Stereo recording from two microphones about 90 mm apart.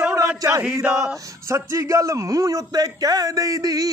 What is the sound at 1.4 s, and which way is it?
A man's voice, 30° right (ahead or behind).